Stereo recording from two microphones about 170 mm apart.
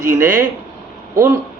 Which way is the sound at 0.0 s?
15° right (ahead or behind).